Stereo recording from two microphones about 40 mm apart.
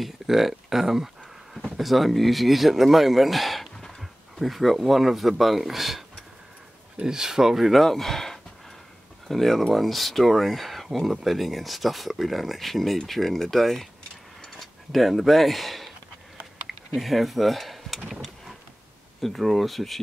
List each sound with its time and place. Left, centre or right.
0.0 s a sound: centre
1.8 s speech: centre
7.0 s speech: centre
7.8 s speech: centre
14.4 s a sound: centre
16.6 s speech: centre
19.2 s speech: centre